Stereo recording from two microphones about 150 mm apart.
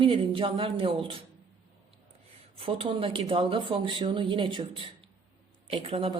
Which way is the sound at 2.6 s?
35° right (ahead or behind).